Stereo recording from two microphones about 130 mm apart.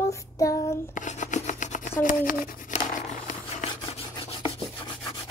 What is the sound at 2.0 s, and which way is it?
Speech, 90° left.